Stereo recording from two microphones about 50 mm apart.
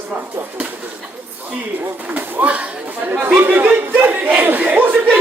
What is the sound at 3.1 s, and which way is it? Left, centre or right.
Chatter, right.